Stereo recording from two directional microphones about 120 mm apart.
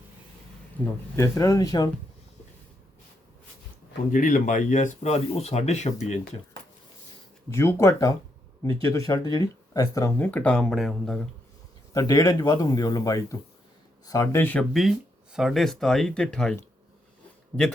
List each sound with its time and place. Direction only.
0.8 s speech: 15° left (ahead or behind)
1.1 s speech: 30° left (ahead or behind)
4.1 s speech: 90° left; by 6.1 s 70° left (ahead or behind)
7.5 s speech: 20° left (ahead or behind)
10.2 s speech: 15° left (ahead or behind)
11.9 s speech: 30° left (ahead or behind)
14.7 s speech: centre (ahead or behind)